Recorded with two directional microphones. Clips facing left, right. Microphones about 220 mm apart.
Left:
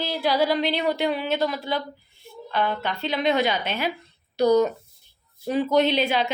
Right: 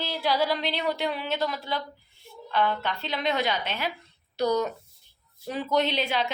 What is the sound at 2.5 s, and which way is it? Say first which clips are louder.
A woman's voice: left 1 dB; 5° left (ahead or behind).